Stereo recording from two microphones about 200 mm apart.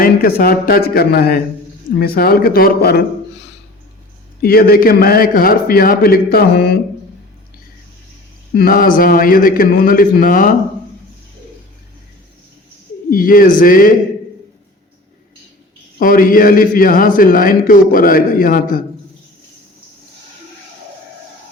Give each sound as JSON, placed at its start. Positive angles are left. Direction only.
{"t": 0.0, "sound": "a man's voice", "side_deg": 45}
{"t": 4.4, "sound": "a man's voice", "side_deg": 50}
{"t": 8.5, "sound": "a man's voice", "side_deg": 45}
{"t": 13.1, "sound": "a man's voice", "side_deg": 45}
{"t": 16.0, "sound": "a man's voice", "side_deg": 45}